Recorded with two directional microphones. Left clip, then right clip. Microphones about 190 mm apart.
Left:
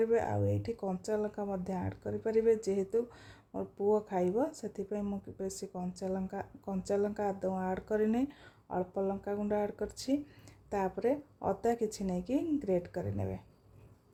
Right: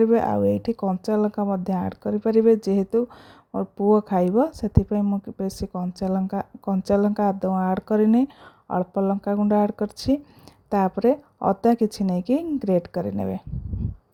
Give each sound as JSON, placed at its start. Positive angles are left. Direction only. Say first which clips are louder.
{"t": 0.0, "sound": "speech", "louder": "right 11 dB", "side_deg": -40}